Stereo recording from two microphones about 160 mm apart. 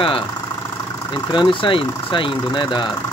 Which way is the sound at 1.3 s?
30° left (ahead or behind).